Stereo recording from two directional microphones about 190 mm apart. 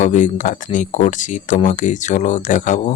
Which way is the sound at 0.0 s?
40° left (ahead or behind).